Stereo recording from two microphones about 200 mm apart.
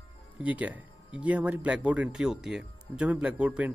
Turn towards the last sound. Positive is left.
turn(degrees=-5)  # may be behind; listen again after turning